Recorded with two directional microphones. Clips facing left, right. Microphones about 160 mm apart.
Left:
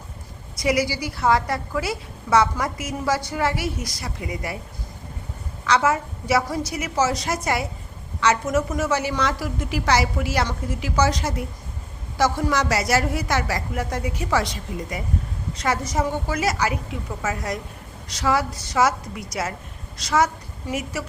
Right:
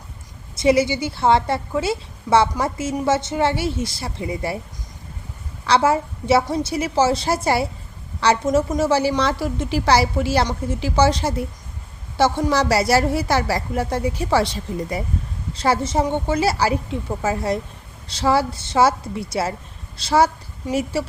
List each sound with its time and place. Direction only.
0.5 s a woman's voice: 25° right (ahead or behind)
5.6 s a woman's voice: 30° right (ahead or behind)